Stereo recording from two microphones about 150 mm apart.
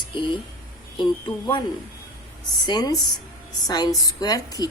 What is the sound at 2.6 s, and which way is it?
A woman's voice, 25° left (ahead or behind).